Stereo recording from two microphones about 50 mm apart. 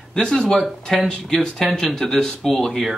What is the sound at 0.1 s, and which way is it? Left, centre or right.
Speech, centre.